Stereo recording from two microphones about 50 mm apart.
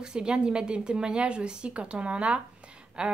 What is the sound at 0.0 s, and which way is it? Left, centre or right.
A woman's voice, centre.